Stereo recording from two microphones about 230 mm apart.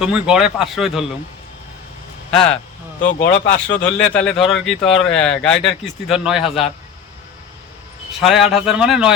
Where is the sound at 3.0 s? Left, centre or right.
Left.